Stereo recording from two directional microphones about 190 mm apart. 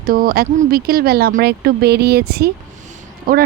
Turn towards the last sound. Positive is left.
turn(degrees=-50)  # may be behind; listen again after turning